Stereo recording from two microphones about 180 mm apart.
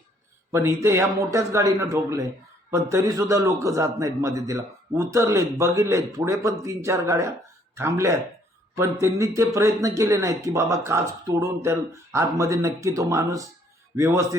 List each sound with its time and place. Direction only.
0.5 s a man's voice: 15° right (ahead or behind)